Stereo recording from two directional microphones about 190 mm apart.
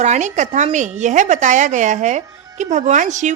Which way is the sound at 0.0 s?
40° right (ahead or behind).